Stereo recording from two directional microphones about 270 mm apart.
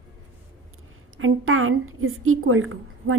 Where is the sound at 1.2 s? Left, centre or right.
Right.